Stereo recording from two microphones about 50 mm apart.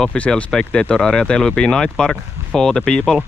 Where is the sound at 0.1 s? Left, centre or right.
Centre.